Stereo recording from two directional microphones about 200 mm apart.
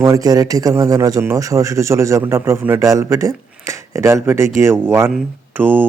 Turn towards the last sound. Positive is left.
turn(degrees=-10)  # may be behind; listen again after turning